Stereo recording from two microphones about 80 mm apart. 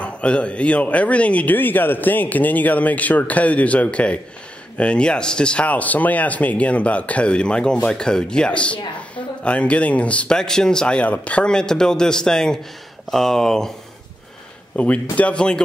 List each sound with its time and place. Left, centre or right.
0.0 s speech: centre
14.8 s speech: centre